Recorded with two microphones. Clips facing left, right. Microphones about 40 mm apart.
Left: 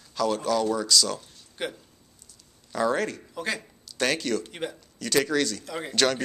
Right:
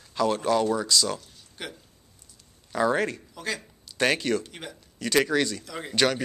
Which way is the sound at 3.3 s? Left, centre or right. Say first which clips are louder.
Left 2 dB; centre.